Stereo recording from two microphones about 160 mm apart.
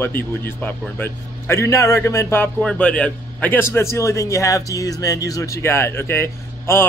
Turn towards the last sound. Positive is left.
turn(degrees=15)  # may be behind; listen again after turning